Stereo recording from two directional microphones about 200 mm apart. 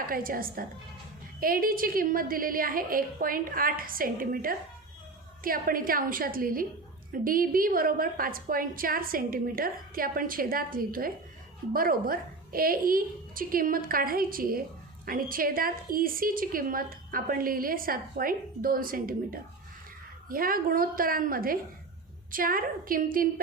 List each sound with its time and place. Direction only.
0.1 s a woman's voice: 45° right (ahead or behind)